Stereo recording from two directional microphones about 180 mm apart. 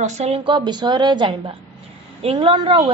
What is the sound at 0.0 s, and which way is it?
A woman's voice, 35° right (ahead or behind).